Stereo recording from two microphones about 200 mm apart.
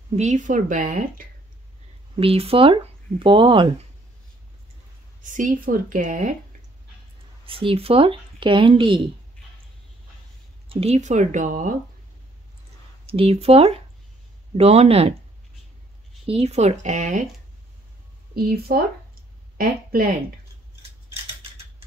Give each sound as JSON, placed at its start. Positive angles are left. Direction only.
{"t": 0.1, "sound": "speech", "side_deg": -35}
{"t": 2.1, "sound": "speech", "side_deg": -30}
{"t": 5.2, "sound": "speech", "side_deg": -40}
{"t": 7.4, "sound": "speech", "side_deg": -25}
{"t": 10.7, "sound": "speech", "side_deg": -30}
{"t": 13.0, "sound": "speech", "side_deg": -30}
{"t": 16.3, "sound": "speech", "side_deg": -30}
{"t": 18.3, "sound": "speech", "side_deg": -50}